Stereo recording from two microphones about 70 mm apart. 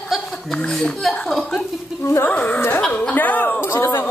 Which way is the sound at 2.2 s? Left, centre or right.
Left.